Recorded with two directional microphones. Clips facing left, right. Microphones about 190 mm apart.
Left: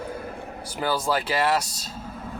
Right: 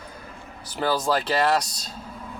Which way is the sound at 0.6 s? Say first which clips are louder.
Right 2 dB; 10° left (ahead or behind).